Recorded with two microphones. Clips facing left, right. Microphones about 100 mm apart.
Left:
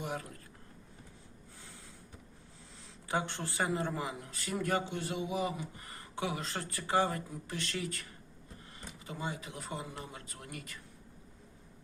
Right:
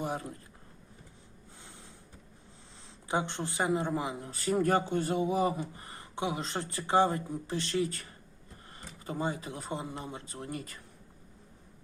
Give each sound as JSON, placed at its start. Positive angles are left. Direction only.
{"t": 0.0, "sound": "a man's voice", "side_deg": -30}
{"t": 3.1, "sound": "speech", "side_deg": -20}
{"t": 4.3, "sound": "speech", "side_deg": -35}
{"t": 5.9, "sound": "speech", "side_deg": -20}
{"t": 9.0, "sound": "speech", "side_deg": -35}